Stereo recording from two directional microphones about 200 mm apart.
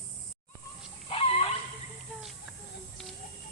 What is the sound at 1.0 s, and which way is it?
Dog, 30° left (ahead or behind).